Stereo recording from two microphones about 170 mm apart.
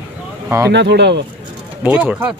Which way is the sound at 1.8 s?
10° right (ahead or behind).